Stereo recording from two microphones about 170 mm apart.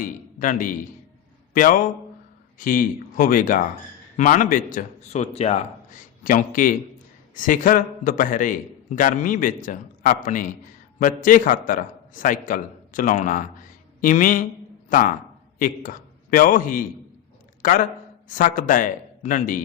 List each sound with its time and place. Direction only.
0.0 s a man's voice: 50° left (ahead or behind)
6.2 s a man's voice: 55° left (ahead or behind)